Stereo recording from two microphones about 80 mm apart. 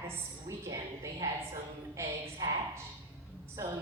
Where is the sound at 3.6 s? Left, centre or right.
Right.